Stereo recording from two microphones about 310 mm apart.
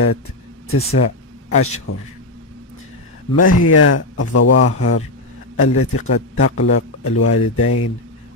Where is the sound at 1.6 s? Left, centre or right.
Left.